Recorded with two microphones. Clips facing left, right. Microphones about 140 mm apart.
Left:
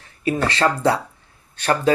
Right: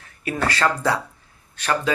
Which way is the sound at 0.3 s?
25° left (ahead or behind).